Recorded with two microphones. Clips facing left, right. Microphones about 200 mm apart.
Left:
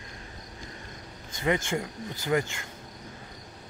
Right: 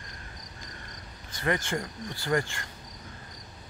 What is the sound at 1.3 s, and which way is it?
Speech, 20° left (ahead or behind).